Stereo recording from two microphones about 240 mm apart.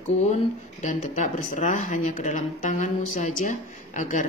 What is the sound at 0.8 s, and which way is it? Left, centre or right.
Speech, left.